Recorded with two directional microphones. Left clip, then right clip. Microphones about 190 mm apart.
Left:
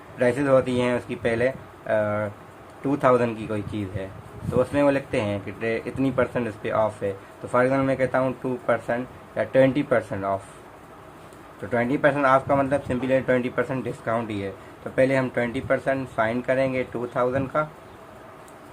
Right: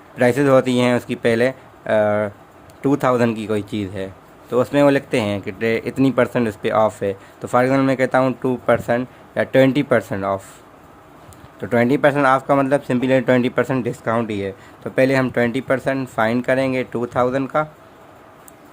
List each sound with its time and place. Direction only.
0.2 s speech: 55° right (ahead or behind)
11.7 s speech: 55° right (ahead or behind)